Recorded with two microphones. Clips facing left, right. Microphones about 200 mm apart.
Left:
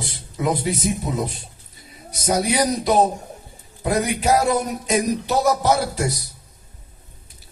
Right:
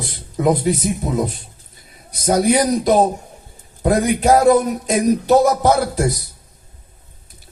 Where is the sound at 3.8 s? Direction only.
55° right (ahead or behind).